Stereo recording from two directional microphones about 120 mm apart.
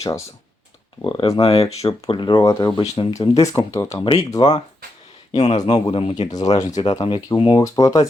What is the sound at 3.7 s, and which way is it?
Speech, 25° left (ahead or behind).